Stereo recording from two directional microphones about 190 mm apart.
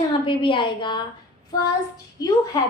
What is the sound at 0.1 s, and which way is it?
Speech, 25° left (ahead or behind).